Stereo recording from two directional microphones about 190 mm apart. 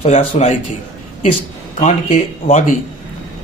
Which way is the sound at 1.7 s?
40° left (ahead or behind).